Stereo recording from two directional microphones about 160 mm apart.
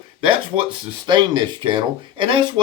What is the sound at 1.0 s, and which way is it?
Speech, 30° right (ahead or behind).